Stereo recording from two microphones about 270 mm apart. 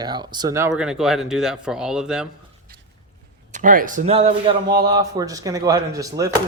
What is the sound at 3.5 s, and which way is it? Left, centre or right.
Speech, right.